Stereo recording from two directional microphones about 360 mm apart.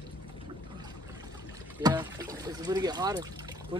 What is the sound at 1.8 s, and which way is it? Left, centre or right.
Speech, centre.